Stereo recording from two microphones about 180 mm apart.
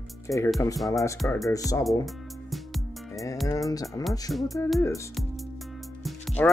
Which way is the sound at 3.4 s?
20° left (ahead or behind).